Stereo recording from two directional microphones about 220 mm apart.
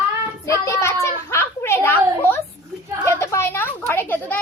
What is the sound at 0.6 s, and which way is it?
A woman's voice, 10° left (ahead or behind).